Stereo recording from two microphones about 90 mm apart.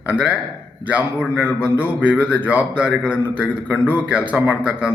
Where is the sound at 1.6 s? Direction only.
15° right (ahead or behind).